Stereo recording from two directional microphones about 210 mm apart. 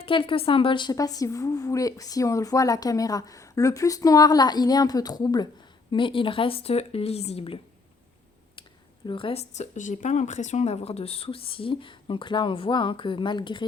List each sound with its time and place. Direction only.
0.0 s a woman's voice: 25° left (ahead or behind)
9.0 s speech: 25° left (ahead or behind)